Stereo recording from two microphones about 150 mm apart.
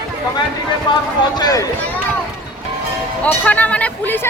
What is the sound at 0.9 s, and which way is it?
Speech, 30° left (ahead or behind).